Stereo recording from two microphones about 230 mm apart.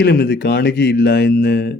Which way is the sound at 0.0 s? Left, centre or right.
Left.